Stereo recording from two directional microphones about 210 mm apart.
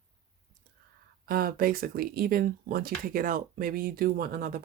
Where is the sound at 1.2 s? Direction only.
45° right (ahead or behind).